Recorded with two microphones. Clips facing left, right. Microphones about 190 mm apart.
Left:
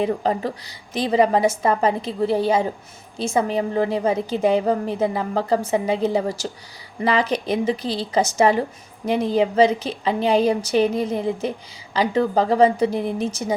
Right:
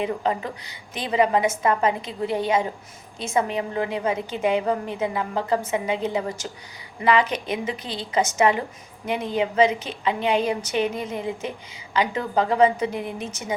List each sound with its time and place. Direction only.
0.0 s a woman's voice: 35° left (ahead or behind)